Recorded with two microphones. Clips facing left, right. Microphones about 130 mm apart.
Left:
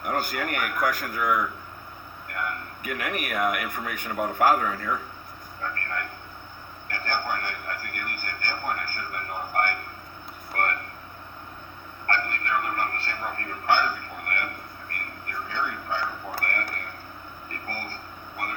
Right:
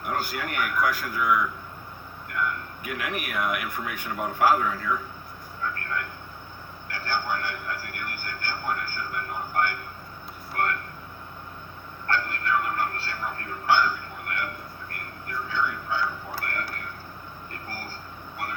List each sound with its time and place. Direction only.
0.0 s speech: 50° left (ahead or behind)
6.8 s speech: 50° left (ahead or behind)
10.5 s vehicle: 50° left (ahead or behind)
12.0 s a sound: 50° left (ahead or behind)